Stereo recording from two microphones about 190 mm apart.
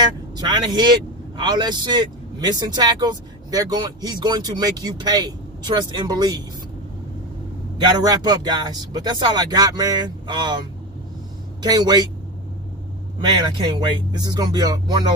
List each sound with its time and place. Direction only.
0.4 s speech: 25° right (ahead or behind)
7.7 s speech: 20° right (ahead or behind)
11.6 s speech: 20° right (ahead or behind)
13.7 s speech: 20° right (ahead or behind)